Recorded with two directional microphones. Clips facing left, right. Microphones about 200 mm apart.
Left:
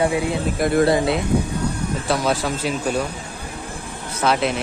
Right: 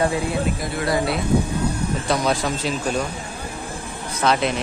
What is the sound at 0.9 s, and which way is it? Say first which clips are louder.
Speech: left 3 dB; 25° left (ahead or behind).